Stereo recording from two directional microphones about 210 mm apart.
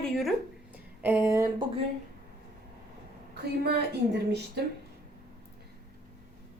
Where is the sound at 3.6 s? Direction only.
50° right (ahead or behind).